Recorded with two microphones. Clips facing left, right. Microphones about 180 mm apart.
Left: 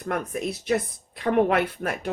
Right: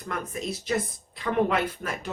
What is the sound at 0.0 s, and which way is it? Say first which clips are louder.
Speech: left 5 dB; 60° left (ahead or behind).